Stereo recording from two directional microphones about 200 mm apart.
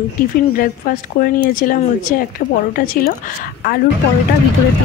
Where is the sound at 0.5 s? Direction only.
45° left (ahead or behind).